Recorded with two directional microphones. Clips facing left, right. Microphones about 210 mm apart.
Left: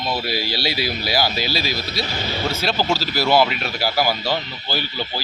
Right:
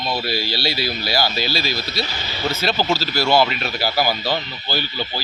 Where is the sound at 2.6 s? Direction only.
Centre (ahead or behind).